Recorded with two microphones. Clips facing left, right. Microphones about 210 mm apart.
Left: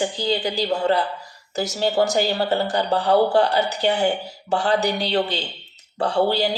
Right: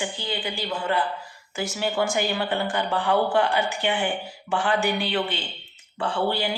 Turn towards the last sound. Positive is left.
turn(degrees=40)  # may be behind; listen again after turning